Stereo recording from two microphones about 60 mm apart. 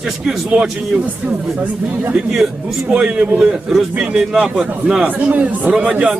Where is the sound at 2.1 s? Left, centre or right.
Centre.